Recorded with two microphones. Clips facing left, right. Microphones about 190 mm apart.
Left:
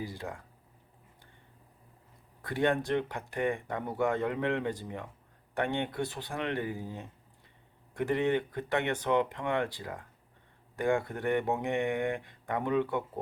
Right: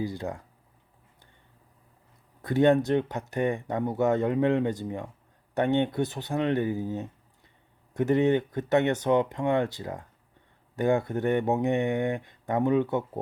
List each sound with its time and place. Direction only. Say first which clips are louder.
0.0 s speech: right 7 dB; 20° right (ahead or behind)
2.4 s speech: right 8 dB; 20° right (ahead or behind)